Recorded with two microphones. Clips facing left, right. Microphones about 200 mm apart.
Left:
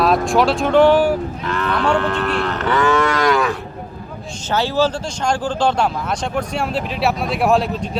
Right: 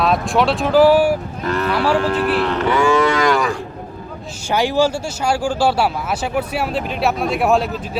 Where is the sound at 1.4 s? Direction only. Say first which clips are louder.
Right 2 dB; 40° right (ahead or behind).